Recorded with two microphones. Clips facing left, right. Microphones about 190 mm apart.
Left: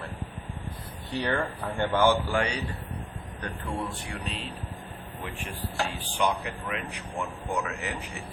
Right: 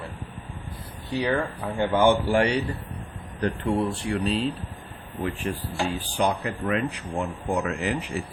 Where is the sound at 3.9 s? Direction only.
30° right (ahead or behind).